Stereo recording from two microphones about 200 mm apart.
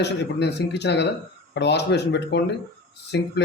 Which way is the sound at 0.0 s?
60° left (ahead or behind).